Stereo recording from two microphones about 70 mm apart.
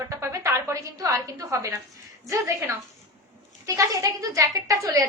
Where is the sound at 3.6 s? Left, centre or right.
Right.